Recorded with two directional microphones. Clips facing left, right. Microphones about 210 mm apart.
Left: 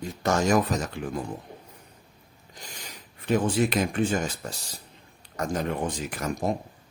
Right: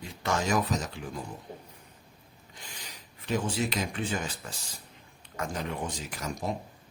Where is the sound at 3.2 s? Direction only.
55° left (ahead or behind).